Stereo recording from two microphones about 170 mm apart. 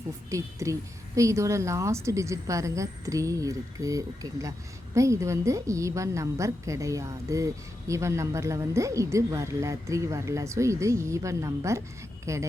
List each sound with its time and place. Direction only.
0.3 s a woman's voice: 20° right (ahead or behind)